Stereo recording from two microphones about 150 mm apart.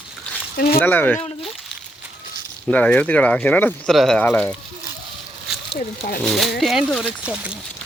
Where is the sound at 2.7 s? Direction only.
10° left (ahead or behind).